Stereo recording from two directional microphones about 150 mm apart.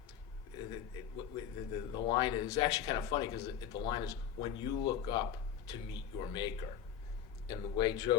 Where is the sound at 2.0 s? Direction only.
30° left (ahead or behind).